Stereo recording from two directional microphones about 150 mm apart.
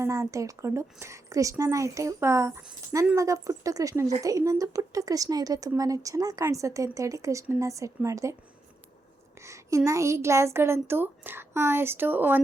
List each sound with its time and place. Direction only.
0.0 s a woman's voice: 20° right (ahead or behind)
9.4 s a woman's voice: 20° right (ahead or behind)